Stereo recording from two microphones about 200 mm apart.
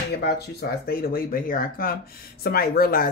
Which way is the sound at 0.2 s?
55° left (ahead or behind).